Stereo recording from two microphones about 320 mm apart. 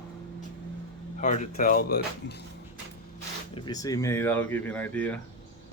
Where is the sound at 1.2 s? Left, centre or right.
Left.